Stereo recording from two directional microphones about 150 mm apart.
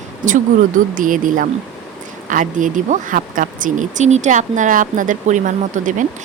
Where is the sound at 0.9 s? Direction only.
65° right (ahead or behind).